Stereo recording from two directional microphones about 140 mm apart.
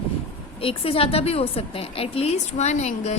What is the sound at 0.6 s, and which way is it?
A woman's voice, 40° left (ahead or behind).